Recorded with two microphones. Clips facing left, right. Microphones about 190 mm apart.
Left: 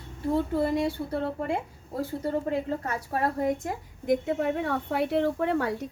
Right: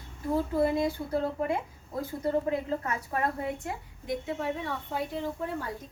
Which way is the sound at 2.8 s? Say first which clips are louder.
Left 2 dB; 40° left (ahead or behind).